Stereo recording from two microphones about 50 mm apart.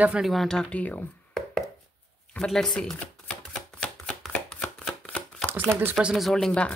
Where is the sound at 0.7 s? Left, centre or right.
Left.